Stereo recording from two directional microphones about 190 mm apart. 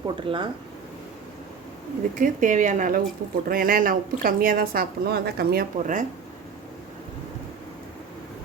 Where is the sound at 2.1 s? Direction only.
45° right (ahead or behind).